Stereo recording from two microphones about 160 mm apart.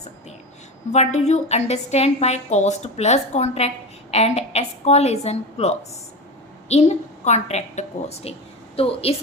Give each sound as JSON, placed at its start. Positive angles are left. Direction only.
{"t": 0.9, "sound": "a woman's voice", "side_deg": 45}